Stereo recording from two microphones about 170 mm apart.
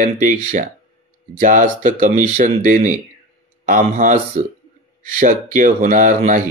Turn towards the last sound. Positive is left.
turn(degrees=-50)  # may be behind; listen again after turning